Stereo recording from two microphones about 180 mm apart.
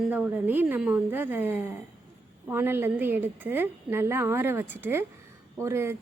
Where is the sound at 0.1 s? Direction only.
10° right (ahead or behind).